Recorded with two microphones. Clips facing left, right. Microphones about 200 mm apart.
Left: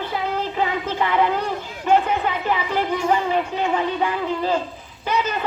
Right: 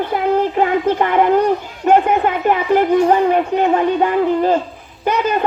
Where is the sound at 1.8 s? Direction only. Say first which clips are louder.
Right 5 dB; 50° right (ahead or behind).